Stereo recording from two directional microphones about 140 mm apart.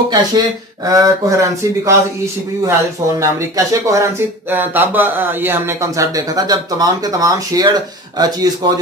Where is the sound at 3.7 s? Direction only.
20° right (ahead or behind).